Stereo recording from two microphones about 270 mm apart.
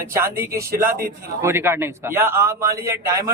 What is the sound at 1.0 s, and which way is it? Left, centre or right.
Speech, right.